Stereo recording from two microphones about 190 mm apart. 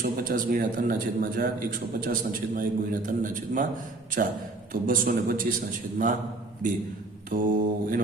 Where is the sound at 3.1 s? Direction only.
45° right (ahead or behind).